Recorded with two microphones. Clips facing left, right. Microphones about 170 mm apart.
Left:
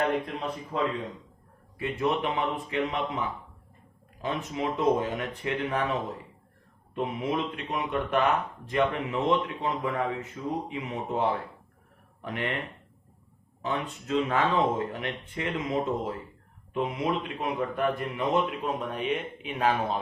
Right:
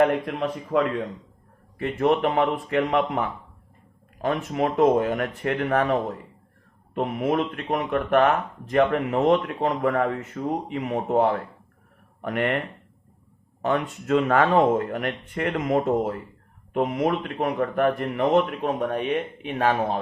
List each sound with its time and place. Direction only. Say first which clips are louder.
1.8 s speech: right 6 dB; 50° right (ahead or behind)